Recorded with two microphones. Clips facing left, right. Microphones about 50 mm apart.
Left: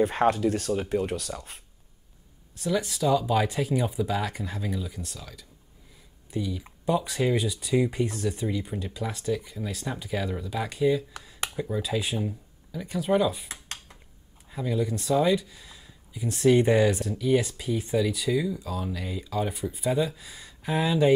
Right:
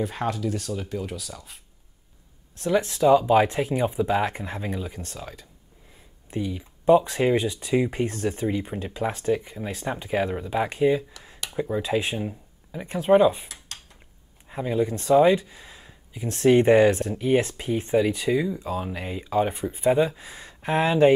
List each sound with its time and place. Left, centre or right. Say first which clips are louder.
0.1 s speech: left 4 dB; left
2.6 s speech: right 5 dB; right
11.5 s speech: right 5 dB; right
11.8 s speech: right 3 dB; right
14.5 s speech: right 3 dB; right